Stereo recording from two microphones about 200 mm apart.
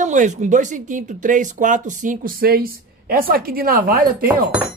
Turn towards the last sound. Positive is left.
turn(degrees=-45)  # may be behind; listen again after turning